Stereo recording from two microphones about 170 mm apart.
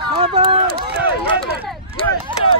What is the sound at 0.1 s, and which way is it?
Run, 30° right (ahead or behind).